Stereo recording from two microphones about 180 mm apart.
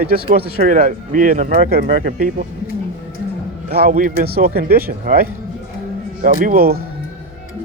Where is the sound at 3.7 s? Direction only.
55° right (ahead or behind).